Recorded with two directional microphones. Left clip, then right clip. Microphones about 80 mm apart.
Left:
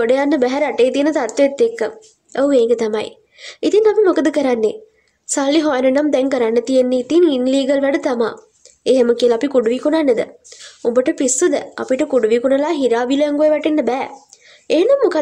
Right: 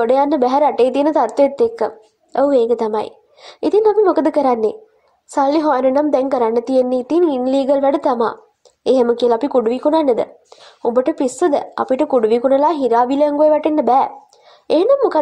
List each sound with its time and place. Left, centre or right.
0.0 s a woman's voice: centre
9.1 s a woman's voice: centre